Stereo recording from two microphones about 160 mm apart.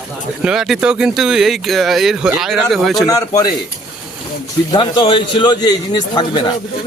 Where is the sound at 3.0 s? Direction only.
20° left (ahead or behind).